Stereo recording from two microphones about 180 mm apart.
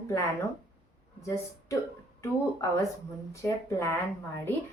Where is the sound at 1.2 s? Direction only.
15° left (ahead or behind).